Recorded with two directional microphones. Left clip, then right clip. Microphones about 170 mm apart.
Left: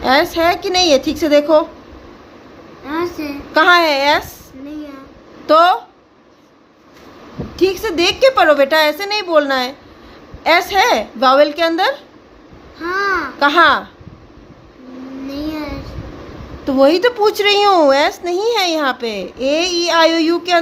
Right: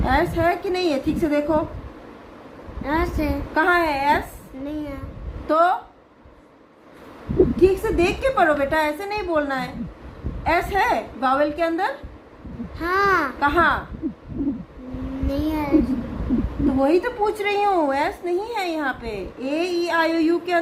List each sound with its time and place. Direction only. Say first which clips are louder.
0.0 s speech: left 7 dB; 75° left (ahead or behind)
2.8 s a child's voice: left 2 dB; 35° right (ahead or behind)
3.5 s speech: left 9 dB; 75° left (ahead or behind)
5.5 s speech: left 8 dB; 75° left (ahead or behind)
7.6 s speech: left 8 dB; 65° left (ahead or behind)
12.8 s babbling: left 2 dB; 45° right (ahead or behind)
13.4 s speech: left 10 dB; 75° left (ahead or behind)
15.3 s child singing: even; 35° right (ahead or behind)
16.7 s speech: left 9 dB; 70° left (ahead or behind)